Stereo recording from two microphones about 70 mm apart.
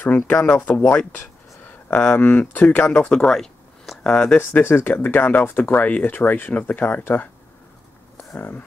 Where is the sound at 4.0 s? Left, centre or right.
Centre.